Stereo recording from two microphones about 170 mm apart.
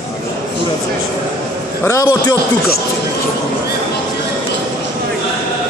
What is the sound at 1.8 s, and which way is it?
Speech, 15° left (ahead or behind).